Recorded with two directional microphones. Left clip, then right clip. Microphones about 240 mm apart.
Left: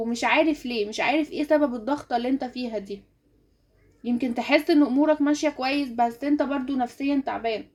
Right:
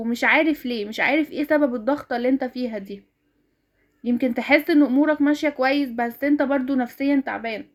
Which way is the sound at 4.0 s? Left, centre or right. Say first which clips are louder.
Right 4 dB; right.